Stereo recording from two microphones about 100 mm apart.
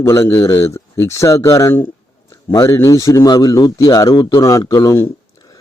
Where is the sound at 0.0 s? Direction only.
30° left (ahead or behind).